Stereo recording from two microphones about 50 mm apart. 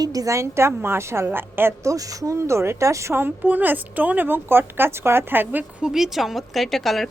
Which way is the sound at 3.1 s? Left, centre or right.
Right.